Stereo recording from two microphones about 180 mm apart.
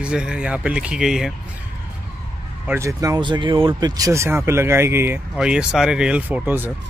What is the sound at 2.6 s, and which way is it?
Speech, 15° right (ahead or behind).